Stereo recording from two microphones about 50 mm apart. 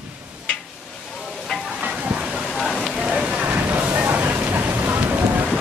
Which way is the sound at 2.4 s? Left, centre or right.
Centre.